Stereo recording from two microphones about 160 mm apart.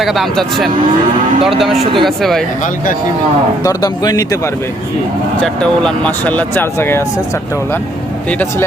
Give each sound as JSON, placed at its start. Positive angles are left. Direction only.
{"t": 0.0, "sound": "speech", "side_deg": 0}
{"t": 1.8, "sound": "speech", "side_deg": -35}
{"t": 2.0, "sound": "speech", "side_deg": 0}
{"t": 3.6, "sound": "speech", "side_deg": 25}
{"t": 5.4, "sound": "speech", "side_deg": 5}
{"t": 8.3, "sound": "speech", "side_deg": 10}